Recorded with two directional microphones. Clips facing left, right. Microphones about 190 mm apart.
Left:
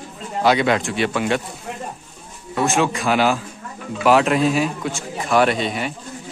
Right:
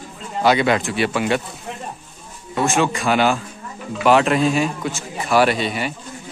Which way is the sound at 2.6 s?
Centre (ahead or behind).